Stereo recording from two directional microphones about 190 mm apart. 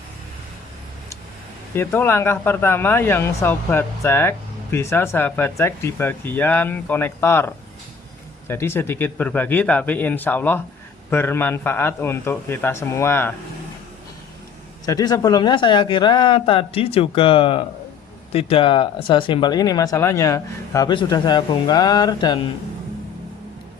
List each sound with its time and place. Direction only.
1.7 s speech: 10° left (ahead or behind)
14.8 s speech: 20° left (ahead or behind)